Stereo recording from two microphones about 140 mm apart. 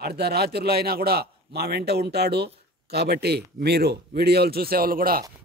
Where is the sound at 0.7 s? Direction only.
90° right.